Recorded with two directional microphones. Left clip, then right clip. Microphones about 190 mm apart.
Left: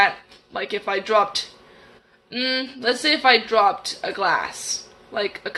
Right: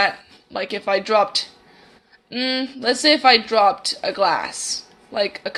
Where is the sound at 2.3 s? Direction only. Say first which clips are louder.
Right 1 dB; 30° right (ahead or behind).